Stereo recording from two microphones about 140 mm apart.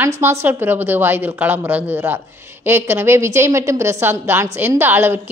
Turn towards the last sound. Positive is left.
turn(degrees=-15)  # may be behind; listen again after turning